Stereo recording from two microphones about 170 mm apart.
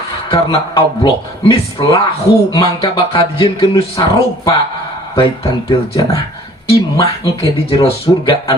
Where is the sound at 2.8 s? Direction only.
35° left (ahead or behind).